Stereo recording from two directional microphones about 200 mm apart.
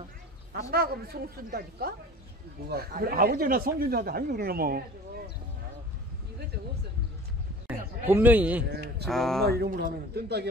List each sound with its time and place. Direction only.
0.5 s speech: 50° right (ahead or behind)
8.1 s a man's voice: 10° right (ahead or behind)
8.6 s speech: 55° right (ahead or behind)
9.0 s a sound: centre (ahead or behind)
9.5 s speech: 55° right (ahead or behind)